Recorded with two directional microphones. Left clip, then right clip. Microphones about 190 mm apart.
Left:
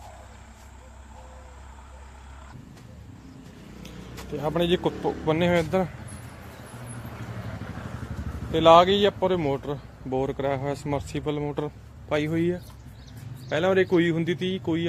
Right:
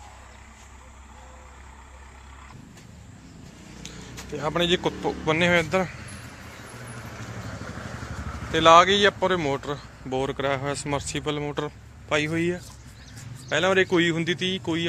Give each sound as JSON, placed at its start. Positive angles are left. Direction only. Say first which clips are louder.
{"t": 3.8, "sound": "a sound", "louder": "right 1 dB", "side_deg": 15}
{"t": 5.2, "sound": "speech", "louder": "right 2 dB", "side_deg": 10}
{"t": 7.6, "sound": "vehicle", "louder": "right 2 dB", "side_deg": -40}
{"t": 8.5, "sound": "speech", "louder": "right 1 dB", "side_deg": 10}